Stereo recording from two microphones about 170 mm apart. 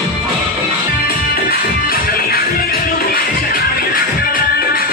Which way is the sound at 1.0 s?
60° left (ahead or behind).